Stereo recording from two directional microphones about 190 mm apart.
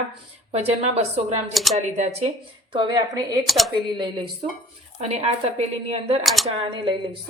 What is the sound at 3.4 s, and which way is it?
Speech, centre (ahead or behind).